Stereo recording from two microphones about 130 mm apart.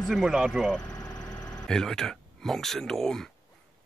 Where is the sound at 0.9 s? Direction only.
20° left (ahead or behind).